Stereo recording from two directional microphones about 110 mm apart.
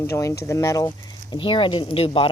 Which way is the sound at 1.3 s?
50° left (ahead or behind).